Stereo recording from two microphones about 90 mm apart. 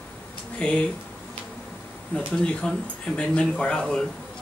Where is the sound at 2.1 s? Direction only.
15° left (ahead or behind).